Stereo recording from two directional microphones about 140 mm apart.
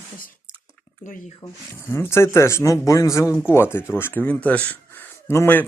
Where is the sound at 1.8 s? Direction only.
15° left (ahead or behind).